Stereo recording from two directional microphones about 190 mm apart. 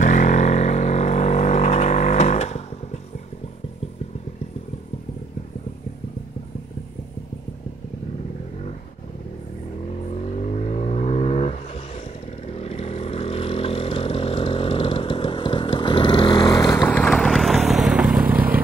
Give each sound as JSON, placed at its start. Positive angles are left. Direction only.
{"t": 0.0, "sound": "vehicle", "side_deg": 40}
{"t": 10.4, "sound": "vehicle", "side_deg": 35}
{"t": 16.9, "sound": "vehicle", "side_deg": 5}